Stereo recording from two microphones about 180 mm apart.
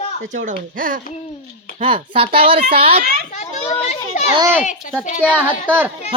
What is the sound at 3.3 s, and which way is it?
Children playing, 40° left (ahead or behind).